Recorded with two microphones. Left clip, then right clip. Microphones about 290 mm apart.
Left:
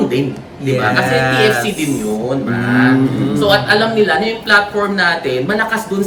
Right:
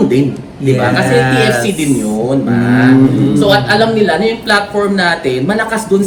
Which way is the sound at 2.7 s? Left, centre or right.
Left.